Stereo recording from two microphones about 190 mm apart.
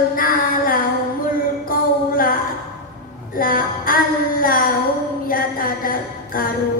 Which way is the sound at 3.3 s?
50° left (ahead or behind).